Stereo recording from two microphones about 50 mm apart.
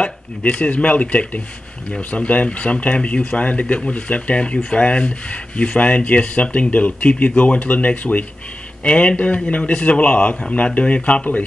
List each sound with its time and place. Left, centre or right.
0.0 s speech: left